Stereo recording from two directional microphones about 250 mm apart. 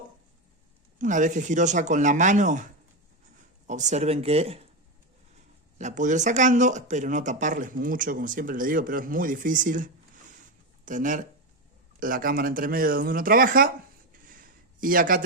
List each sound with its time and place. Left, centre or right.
0.9 s speech: right
3.7 s speech: right
5.7 s speech: right
14.3 s a sound: right